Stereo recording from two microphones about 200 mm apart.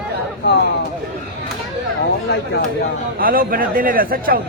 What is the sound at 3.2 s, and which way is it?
A man's voice, 45° right (ahead or behind).